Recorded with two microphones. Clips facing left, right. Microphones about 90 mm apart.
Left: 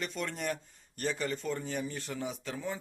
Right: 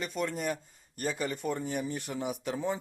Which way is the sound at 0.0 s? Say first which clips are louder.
Right 3 dB; 5° right (ahead or behind).